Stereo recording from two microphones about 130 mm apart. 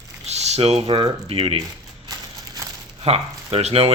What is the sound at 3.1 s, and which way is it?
Speech, 55° right (ahead or behind).